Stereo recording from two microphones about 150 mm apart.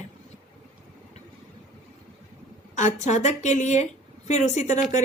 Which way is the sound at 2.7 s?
50° left (ahead or behind).